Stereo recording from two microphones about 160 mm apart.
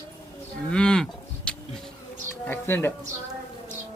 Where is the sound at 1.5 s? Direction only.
5° left (ahead or behind).